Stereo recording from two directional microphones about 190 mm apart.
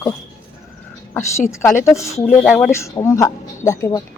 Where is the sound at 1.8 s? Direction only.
15° left (ahead or behind).